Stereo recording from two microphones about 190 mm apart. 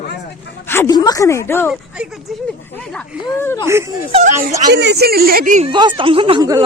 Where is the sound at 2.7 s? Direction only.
5° left (ahead or behind).